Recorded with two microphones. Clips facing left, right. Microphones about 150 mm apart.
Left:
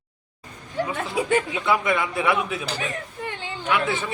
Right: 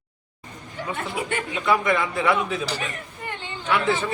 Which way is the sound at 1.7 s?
10° left (ahead or behind).